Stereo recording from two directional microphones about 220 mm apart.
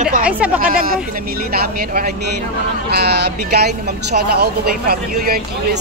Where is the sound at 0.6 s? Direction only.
40° right (ahead or behind).